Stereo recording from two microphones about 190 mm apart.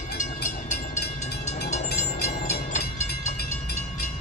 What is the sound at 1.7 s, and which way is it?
Train, 35° left (ahead or behind).